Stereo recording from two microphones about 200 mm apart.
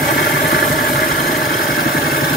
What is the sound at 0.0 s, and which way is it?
Vehicle, 45° left (ahead or behind).